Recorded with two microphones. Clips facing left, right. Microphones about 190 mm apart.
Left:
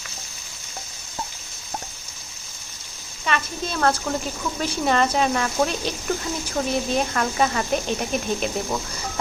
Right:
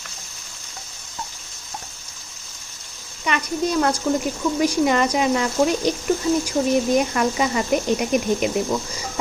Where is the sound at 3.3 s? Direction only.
15° right (ahead or behind).